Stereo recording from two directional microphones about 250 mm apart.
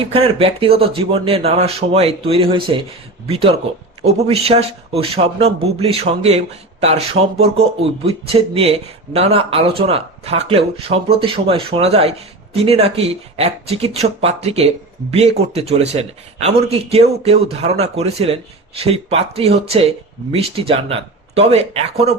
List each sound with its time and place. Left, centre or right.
0.0 s speech: right
13.3 s speech: right